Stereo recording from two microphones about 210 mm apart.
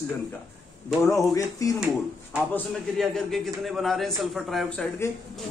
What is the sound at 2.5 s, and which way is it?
A man's voice, centre (ahead or behind).